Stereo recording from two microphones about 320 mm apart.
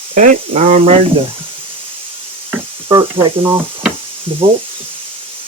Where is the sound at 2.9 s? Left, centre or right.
Centre.